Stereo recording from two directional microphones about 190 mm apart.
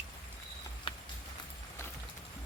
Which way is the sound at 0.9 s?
30° left (ahead or behind).